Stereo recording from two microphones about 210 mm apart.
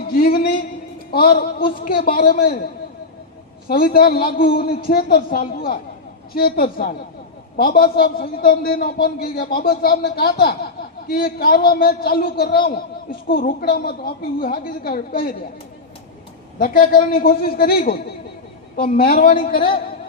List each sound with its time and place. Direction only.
0.1 s a sound: 45° left (ahead or behind)
1.1 s a man's voice: 45° left (ahead or behind)
3.7 s a man's voice: 45° left (ahead or behind)
16.6 s a man's voice: 40° left (ahead or behind)
19.3 s a woman's voice: 25° left (ahead or behind)